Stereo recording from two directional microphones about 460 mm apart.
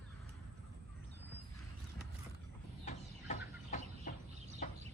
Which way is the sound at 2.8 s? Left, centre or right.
Centre.